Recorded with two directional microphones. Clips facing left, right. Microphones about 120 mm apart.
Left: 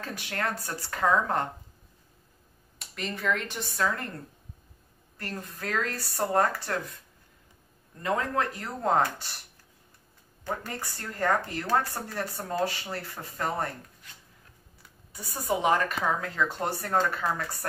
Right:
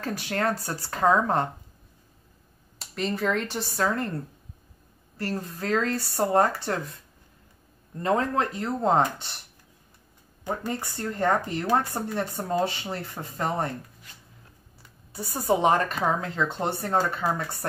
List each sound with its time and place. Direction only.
0.0 s speech: 35° right (ahead or behind)
2.8 s speech: 35° right (ahead or behind)
5.1 s speech: 30° right (ahead or behind)
8.0 s speech: 25° right (ahead or behind)
10.4 s speech: 20° right (ahead or behind)
15.1 s speech: 35° right (ahead or behind)
17.2 s speech: 10° right (ahead or behind)